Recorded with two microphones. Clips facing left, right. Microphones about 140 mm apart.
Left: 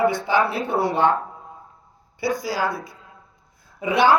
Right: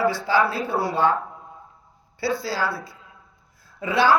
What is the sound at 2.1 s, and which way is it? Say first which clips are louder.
A woman's voice: left 1 dB; 15° left (ahead or behind).